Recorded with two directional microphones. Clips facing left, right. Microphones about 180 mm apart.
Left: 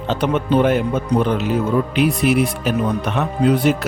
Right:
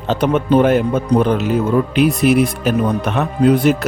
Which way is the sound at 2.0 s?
45° right (ahead or behind).